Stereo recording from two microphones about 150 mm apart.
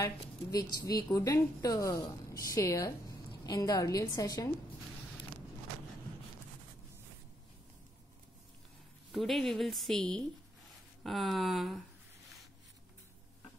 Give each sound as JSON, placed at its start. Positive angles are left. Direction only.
{"t": 0.0, "sound": "a woman's voice", "side_deg": 25}
{"t": 9.1, "sound": "a woman's voice", "side_deg": 0}